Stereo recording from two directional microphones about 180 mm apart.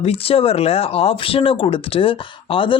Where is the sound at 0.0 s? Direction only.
35° left (ahead or behind).